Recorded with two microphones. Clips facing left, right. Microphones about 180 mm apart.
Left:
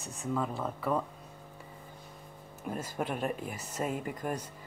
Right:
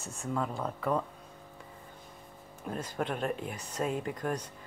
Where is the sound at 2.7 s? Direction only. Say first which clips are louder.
Right 1 dB; 5° left (ahead or behind).